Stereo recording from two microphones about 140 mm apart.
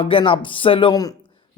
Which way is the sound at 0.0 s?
40° left (ahead or behind).